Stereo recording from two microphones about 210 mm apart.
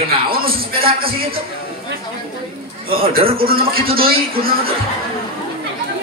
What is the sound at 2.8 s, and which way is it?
A man's voice, 45° right (ahead or behind).